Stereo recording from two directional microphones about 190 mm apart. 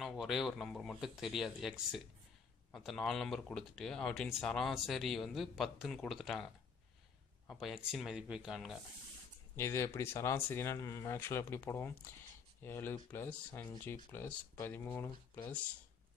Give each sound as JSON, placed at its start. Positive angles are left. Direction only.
{"t": 0.0, "sound": "speech", "side_deg": 0}
{"t": 7.6, "sound": "speech", "side_deg": 0}
{"t": 9.6, "sound": "speech", "side_deg": 15}